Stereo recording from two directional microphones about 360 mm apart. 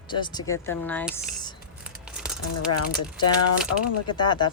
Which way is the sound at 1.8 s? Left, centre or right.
Centre.